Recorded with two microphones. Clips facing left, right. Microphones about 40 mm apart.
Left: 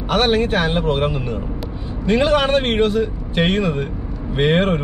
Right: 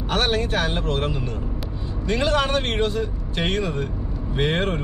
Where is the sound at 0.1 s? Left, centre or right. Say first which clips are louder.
Left 6 dB; left.